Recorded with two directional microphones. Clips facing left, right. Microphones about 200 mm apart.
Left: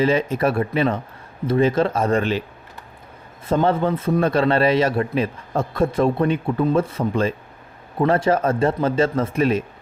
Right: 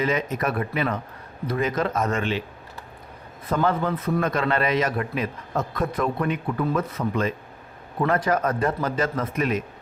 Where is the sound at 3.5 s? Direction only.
30° left (ahead or behind).